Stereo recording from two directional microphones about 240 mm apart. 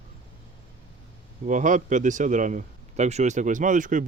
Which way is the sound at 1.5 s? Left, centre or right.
Right.